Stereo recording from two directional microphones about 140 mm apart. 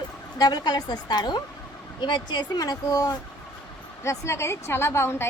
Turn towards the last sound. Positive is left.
turn(degrees=15)  # may be behind; listen again after turning